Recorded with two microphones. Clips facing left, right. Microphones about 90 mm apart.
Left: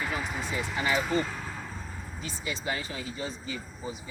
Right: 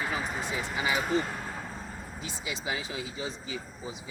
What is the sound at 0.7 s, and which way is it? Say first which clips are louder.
Speech: left 1 dB; 5° right (ahead or behind).